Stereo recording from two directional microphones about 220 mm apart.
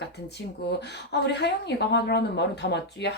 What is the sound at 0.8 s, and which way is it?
Speech, 50° left (ahead or behind).